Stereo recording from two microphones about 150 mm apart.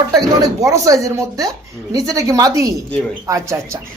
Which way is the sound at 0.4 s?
20° right (ahead or behind).